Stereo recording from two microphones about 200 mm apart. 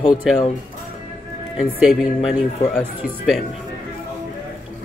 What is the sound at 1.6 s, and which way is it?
Speech, 5° right (ahead or behind).